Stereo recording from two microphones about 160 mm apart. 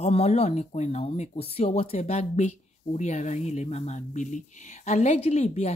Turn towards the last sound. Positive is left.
turn(degrees=45)  # may be behind; listen again after turning